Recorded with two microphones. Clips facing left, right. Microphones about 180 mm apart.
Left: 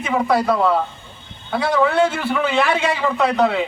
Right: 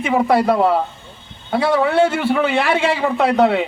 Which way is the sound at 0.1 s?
30° right (ahead or behind).